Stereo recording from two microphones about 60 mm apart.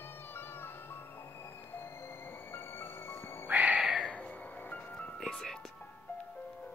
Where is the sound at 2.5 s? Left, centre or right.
Left.